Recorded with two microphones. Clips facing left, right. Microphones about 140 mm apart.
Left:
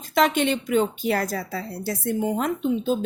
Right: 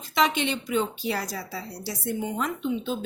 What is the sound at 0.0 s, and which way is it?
A woman's voice, 50° left (ahead or behind).